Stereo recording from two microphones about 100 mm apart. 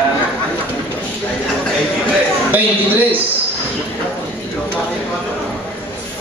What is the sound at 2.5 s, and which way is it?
Speech, 20° right (ahead or behind).